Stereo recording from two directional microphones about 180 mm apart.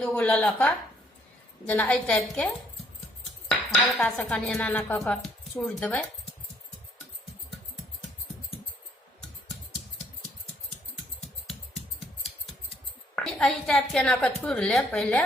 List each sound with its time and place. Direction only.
0.0 s speech: 10° left (ahead or behind)
3.8 s speech: 5° left (ahead or behind)
13.1 s a woman's voice: 5° left (ahead or behind)